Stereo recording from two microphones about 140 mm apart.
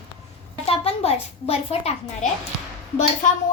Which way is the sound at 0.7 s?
45° left (ahead or behind).